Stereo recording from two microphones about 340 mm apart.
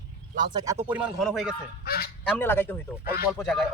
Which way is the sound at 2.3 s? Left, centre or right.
Centre.